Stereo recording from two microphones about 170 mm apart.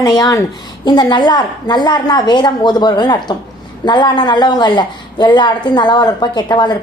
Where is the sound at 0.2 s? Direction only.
20° left (ahead or behind).